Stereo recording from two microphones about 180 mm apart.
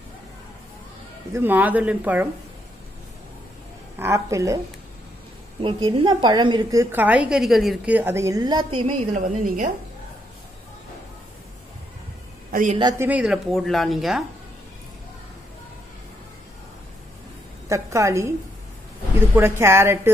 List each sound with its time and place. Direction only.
1.3 s a woman's voice: 10° right (ahead or behind)
4.0 s a woman's voice: 15° right (ahead or behind)
5.6 s a woman's voice: 30° right (ahead or behind)
8.8 s a woman's voice: 45° right (ahead or behind)
12.4 s a sound: 50° right (ahead or behind)
13.0 s speech: 5° right (ahead or behind)
17.6 s a woman's voice: 15° right (ahead or behind)
19.3 s a woman's voice: 15° right (ahead or behind)